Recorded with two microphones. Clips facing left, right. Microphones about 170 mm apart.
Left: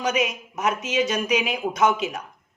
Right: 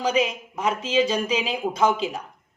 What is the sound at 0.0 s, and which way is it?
Speech, 30° right (ahead or behind).